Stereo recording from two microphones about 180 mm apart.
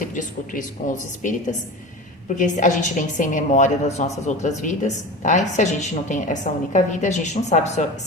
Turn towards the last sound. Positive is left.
turn(degrees=40)  # may be behind; listen again after turning